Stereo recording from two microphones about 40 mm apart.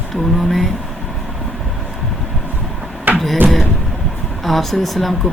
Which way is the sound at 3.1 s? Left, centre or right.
Right.